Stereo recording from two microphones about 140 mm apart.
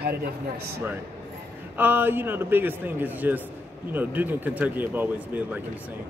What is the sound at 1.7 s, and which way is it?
A man's voice, 15° right (ahead or behind).